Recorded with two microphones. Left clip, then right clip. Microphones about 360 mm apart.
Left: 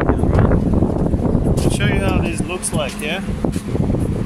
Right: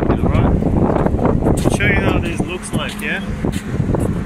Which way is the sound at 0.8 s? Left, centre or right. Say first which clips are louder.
Right 5 dB; right.